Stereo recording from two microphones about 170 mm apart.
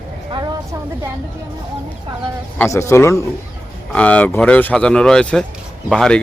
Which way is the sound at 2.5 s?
15° left (ahead or behind).